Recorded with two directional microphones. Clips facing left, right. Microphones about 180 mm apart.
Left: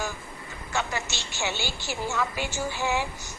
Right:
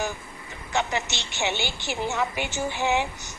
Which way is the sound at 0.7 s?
20° right (ahead or behind).